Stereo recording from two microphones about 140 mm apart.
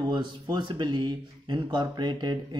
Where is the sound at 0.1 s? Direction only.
35° right (ahead or behind).